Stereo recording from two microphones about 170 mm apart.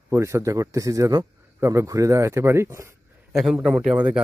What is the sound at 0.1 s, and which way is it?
A man's voice, 15° right (ahead or behind).